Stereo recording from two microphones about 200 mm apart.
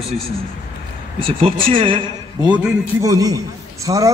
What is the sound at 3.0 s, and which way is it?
Speech, 20° right (ahead or behind).